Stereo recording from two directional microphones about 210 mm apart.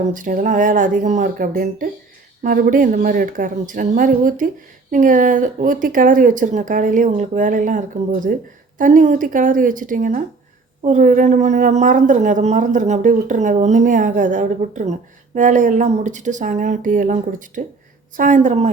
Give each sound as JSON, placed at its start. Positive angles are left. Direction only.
{"t": 0.0, "sound": "speech", "side_deg": -40}